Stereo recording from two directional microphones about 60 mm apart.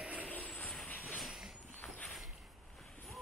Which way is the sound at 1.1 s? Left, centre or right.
Centre.